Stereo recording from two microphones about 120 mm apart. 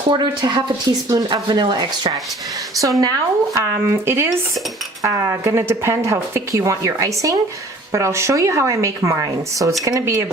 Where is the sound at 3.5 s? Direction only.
20° right (ahead or behind).